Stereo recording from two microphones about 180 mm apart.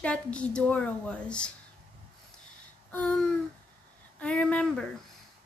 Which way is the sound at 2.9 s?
10° left (ahead or behind).